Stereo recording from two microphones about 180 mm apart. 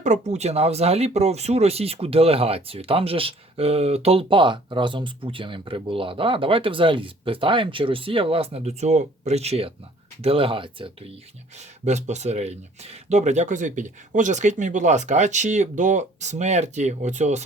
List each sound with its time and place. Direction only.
0.0 s speech: 40° right (ahead or behind)
11.5 s speech: 40° right (ahead or behind)